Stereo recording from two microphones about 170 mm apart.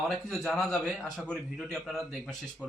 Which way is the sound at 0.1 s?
Centre (ahead or behind).